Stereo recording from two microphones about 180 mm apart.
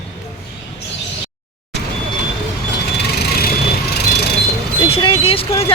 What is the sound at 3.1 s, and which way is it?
Vehicle, 60° left (ahead or behind).